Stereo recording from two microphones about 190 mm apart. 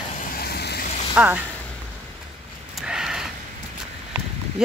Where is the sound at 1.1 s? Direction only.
5° right (ahead or behind).